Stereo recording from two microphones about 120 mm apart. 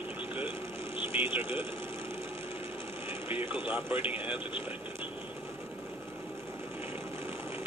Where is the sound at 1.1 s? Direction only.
15° right (ahead or behind).